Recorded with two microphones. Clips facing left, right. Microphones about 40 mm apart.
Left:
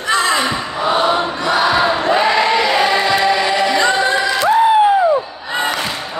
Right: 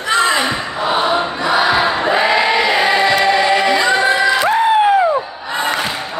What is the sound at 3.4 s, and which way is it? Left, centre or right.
Choir, centre.